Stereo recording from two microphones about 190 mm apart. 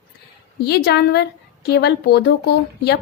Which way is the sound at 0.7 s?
60° left (ahead or behind).